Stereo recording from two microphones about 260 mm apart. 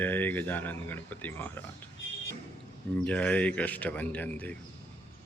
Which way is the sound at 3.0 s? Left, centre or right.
Centre.